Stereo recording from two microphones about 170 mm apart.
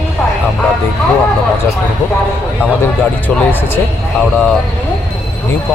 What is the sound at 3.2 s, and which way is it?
Speech, 10° left (ahead or behind).